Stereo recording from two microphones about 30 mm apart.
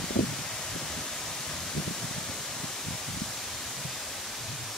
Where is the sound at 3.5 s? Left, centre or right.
Centre.